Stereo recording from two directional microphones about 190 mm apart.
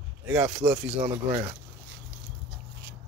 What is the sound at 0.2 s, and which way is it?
Speech, 10° right (ahead or behind).